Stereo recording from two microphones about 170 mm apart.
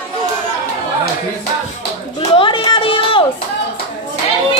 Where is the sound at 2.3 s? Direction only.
30° left (ahead or behind).